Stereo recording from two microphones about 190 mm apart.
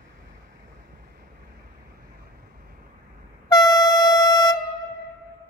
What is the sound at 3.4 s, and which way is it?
Music, 20° left (ahead or behind).